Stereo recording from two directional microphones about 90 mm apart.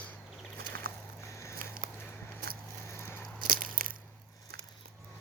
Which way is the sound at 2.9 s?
30° left (ahead or behind).